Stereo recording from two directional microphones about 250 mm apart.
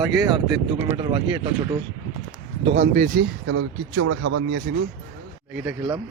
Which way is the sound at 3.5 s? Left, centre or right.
Right.